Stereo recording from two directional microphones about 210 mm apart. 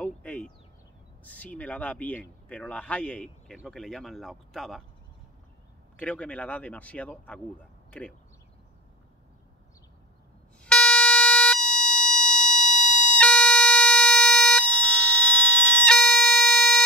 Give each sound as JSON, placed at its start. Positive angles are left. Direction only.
{"t": 0.0, "sound": "a sound", "side_deg": 5}
{"t": 1.2, "sound": "speech", "side_deg": 5}
{"t": 5.9, "sound": "speech", "side_deg": 5}
{"t": 10.6, "sound": "music", "side_deg": 5}
{"t": 12.8, "sound": "music", "side_deg": 35}
{"t": 13.1, "sound": "music", "side_deg": 5}